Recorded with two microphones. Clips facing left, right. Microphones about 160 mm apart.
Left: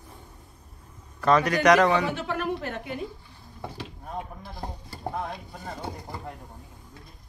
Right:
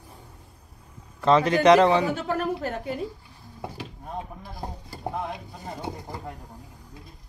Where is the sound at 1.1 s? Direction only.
25° right (ahead or behind).